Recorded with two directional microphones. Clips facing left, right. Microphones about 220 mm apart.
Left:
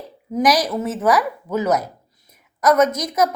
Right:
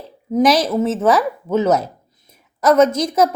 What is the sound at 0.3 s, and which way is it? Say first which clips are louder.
Speech: right 4 dB; 25° right (ahead or behind).